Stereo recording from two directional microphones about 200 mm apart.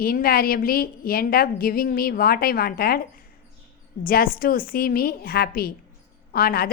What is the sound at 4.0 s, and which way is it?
A woman's voice, 45° left (ahead or behind).